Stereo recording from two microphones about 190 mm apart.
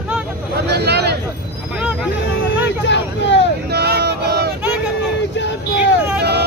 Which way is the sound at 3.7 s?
60° right (ahead or behind).